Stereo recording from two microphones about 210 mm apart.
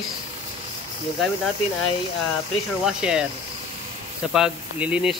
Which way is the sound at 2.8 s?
5° right (ahead or behind).